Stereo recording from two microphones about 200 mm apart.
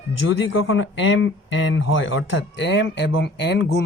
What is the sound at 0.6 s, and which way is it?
Speech, 70° left (ahead or behind).